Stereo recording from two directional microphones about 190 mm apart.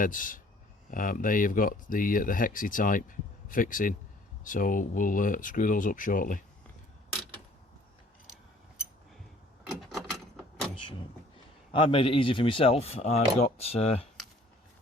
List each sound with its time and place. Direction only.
0.0 s speech: 45° left (ahead or behind)
9.6 s mechanisms: centre (ahead or behind)
11.7 s speech: 30° left (ahead or behind)